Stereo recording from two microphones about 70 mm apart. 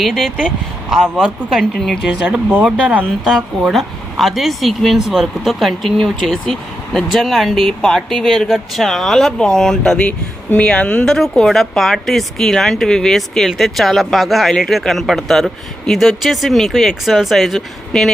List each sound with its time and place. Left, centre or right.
0.0 s speech: centre
1.1 s speech: centre
1.7 s speech: centre
2.2 s speech: centre
3.2 s speech: centre
10.0 s speech: centre